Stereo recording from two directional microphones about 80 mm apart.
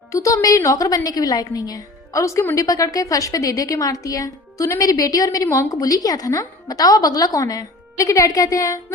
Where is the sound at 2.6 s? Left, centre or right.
Left.